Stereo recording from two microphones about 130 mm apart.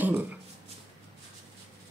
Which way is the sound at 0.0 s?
15° right (ahead or behind).